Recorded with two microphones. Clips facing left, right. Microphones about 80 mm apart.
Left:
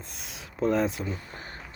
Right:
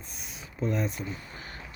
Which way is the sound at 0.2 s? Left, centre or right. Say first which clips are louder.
Left 5 dB; left.